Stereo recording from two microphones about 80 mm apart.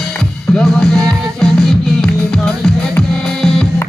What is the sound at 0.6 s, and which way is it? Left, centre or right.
Music, centre.